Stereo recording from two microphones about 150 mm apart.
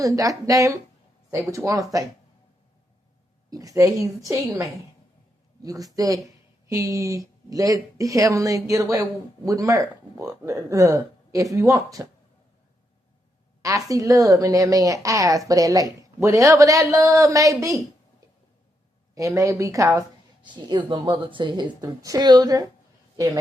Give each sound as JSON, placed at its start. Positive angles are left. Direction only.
{"t": 0.0, "sound": "a woman's voice", "side_deg": -20}
{"t": 3.5, "sound": "a woman's voice", "side_deg": -25}
{"t": 13.6, "sound": "a woman's voice", "side_deg": -20}
{"t": 19.1, "sound": "a woman's voice", "side_deg": -20}